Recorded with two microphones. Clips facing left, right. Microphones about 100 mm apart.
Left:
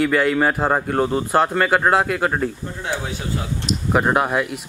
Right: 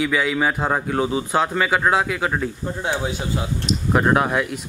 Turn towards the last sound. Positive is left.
turn(degrees=5)  # may be behind; listen again after turning